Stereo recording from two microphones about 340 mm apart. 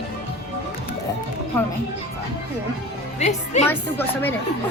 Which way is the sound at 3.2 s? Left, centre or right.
Centre.